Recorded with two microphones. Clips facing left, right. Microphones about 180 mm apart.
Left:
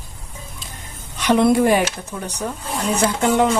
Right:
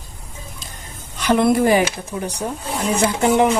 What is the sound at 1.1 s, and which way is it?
Speech, centre (ahead or behind).